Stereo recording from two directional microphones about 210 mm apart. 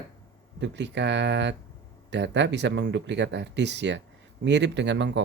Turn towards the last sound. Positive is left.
turn(degrees=-55)  # may be behind; listen again after turning